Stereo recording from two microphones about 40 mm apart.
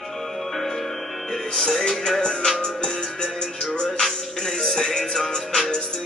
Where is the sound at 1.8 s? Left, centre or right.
Centre.